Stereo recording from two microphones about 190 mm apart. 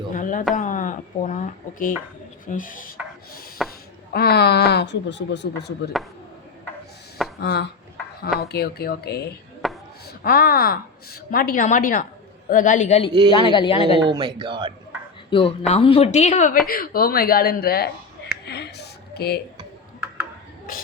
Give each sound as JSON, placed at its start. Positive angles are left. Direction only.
{"t": 0.1, "sound": "a woman's voice", "side_deg": 45}
{"t": 2.5, "sound": "a woman's voice", "side_deg": 45}
{"t": 7.3, "sound": "speech", "side_deg": 60}
{"t": 9.6, "sound": "chop", "side_deg": 0}
{"t": 10.1, "sound": "a woman's voice", "side_deg": 50}
{"t": 13.3, "sound": "speech", "side_deg": 25}
{"t": 14.0, "sound": "speech", "side_deg": -25}
{"t": 15.3, "sound": "a woman's voice", "side_deg": 30}
{"t": 16.6, "sound": "a woman's voice", "side_deg": 50}
{"t": 18.4, "sound": "a sound", "side_deg": 60}
{"t": 19.1, "sound": "speech", "side_deg": 60}